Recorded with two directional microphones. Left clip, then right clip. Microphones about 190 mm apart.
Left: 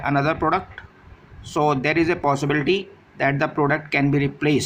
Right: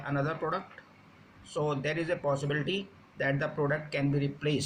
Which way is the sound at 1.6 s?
50° left (ahead or behind).